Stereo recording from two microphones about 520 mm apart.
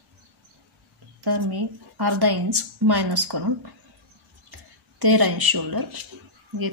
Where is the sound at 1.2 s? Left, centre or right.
Right.